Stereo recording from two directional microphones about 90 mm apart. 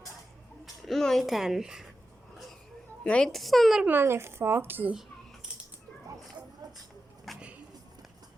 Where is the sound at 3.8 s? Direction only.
25° right (ahead or behind).